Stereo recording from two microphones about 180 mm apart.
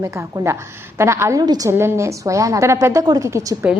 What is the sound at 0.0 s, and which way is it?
A woman's voice, 15° right (ahead or behind).